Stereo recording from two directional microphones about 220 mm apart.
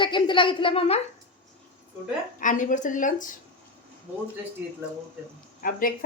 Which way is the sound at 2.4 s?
35° left (ahead or behind).